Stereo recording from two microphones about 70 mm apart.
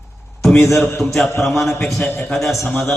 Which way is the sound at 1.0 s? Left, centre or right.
Centre.